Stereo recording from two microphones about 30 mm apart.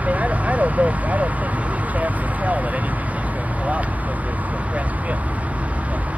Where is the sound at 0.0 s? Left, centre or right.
Right.